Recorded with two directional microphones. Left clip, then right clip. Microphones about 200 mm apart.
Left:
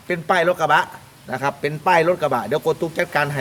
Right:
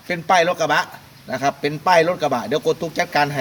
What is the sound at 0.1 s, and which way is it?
A man's voice, 10° left (ahead or behind).